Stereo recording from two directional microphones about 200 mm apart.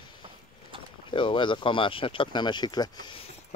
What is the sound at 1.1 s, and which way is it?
Speech, 25° left (ahead or behind).